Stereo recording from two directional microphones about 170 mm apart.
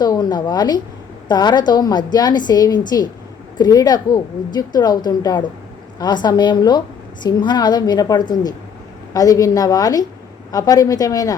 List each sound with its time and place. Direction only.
0.0 s a woman's voice: 25° left (ahead or behind)